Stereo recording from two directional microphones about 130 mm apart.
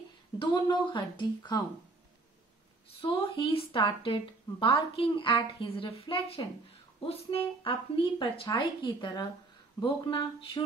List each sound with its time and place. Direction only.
0.4 s speech: 35° left (ahead or behind)
3.0 s speech: 40° left (ahead or behind)